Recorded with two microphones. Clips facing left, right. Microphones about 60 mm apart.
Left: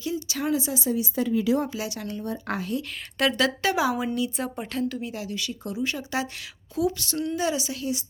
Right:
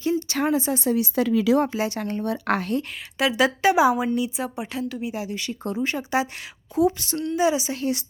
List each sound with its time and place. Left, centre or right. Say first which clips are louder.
0.0 s a sound: right 5 dB; right
0.5 s speech: right 1 dB; right
0.8 s speech: right 4 dB; right
1.7 s speech: right 6 dB; right
2.2 s speech: right 6 dB; right
3.2 s speech: right 1 dB; centre
3.4 s speech: right 9 dB; right
4.4 s speech: even; centre
4.9 s speech: right 3 dB; centre